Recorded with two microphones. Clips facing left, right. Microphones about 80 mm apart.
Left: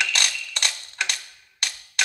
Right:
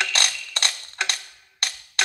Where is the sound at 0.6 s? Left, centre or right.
Right.